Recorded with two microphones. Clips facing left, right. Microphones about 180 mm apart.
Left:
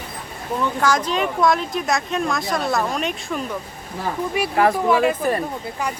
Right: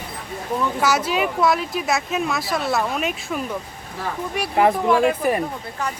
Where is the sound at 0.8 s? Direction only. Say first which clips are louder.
Even; 10° right (ahead or behind).